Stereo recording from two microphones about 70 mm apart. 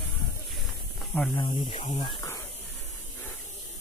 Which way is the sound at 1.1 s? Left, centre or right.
Centre.